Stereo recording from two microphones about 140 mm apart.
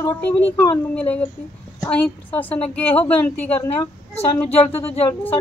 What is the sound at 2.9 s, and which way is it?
Speech, 45° left (ahead or behind).